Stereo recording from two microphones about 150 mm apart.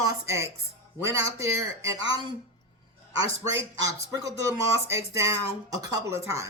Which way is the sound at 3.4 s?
20° right (ahead or behind).